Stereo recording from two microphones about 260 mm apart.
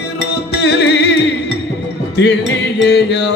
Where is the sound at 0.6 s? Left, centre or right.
Left.